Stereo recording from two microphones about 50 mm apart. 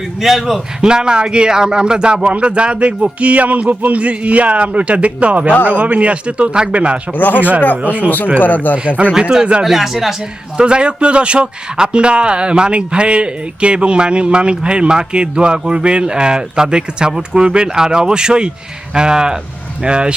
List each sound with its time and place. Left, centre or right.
0.2 s speech: centre
0.8 s a man's voice: centre
7.1 s speech: left
7.8 s a man's voice: right
8.4 s speech: left
9.1 s a man's voice: centre
9.6 s speech: centre
10.6 s a man's voice: centre